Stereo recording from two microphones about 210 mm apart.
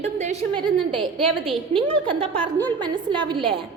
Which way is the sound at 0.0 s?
25° right (ahead or behind).